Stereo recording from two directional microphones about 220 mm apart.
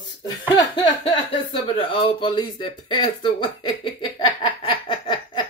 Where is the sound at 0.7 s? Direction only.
25° left (ahead or behind).